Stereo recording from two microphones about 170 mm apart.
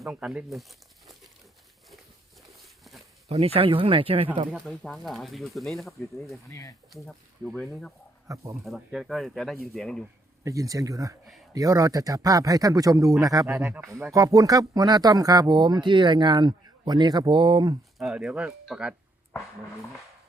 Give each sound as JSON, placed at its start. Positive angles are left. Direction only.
{"t": 0.1, "sound": "speech", "side_deg": -5}
{"t": 3.2, "sound": "speech", "side_deg": -35}
{"t": 4.5, "sound": "speech", "side_deg": 0}
{"t": 6.5, "sound": "speech", "side_deg": 20}
{"t": 6.9, "sound": "speech", "side_deg": 5}
{"t": 8.3, "sound": "speech", "side_deg": -20}
{"t": 8.6, "sound": "speech", "side_deg": 0}
{"t": 10.4, "sound": "speech", "side_deg": -20}
{"t": 13.8, "sound": "speech", "side_deg": 0}
{"t": 14.1, "sound": "speech", "side_deg": -20}
{"t": 17.9, "sound": "speech", "side_deg": -5}
{"t": 19.3, "sound": "speech", "side_deg": 15}